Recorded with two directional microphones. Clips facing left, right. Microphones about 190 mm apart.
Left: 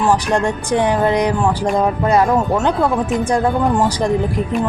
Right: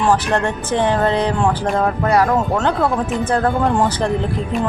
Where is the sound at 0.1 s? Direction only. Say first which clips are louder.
Left 1 dB; 10° left (ahead or behind).